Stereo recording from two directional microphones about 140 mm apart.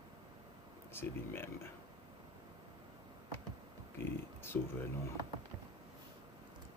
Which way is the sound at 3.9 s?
15° left (ahead or behind).